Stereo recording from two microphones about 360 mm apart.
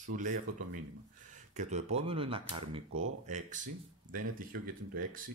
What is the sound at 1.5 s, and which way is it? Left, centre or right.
Speech, centre.